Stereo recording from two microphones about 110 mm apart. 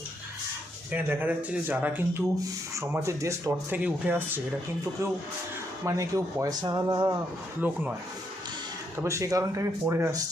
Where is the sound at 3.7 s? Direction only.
15° right (ahead or behind).